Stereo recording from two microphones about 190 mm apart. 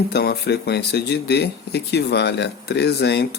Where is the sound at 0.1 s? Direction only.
60° left (ahead or behind).